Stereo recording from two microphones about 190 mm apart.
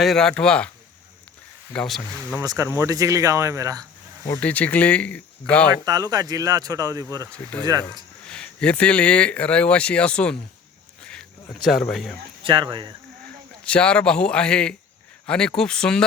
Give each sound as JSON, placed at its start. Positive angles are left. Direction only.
{"t": 0.0, "sound": "speech", "side_deg": 0}
{"t": 1.7, "sound": "speech", "side_deg": 5}
{"t": 2.3, "sound": "speech", "side_deg": -15}
{"t": 4.4, "sound": "speech", "side_deg": 5}
{"t": 5.8, "sound": "speech", "side_deg": -20}
{"t": 7.3, "sound": "speech", "side_deg": 5}
{"t": 7.6, "sound": "speech", "side_deg": -20}
{"t": 8.3, "sound": "speech", "side_deg": 5}
{"t": 11.0, "sound": "a sound", "side_deg": 5}
{"t": 12.4, "sound": "speech", "side_deg": -25}
{"t": 13.7, "sound": "speech", "side_deg": 5}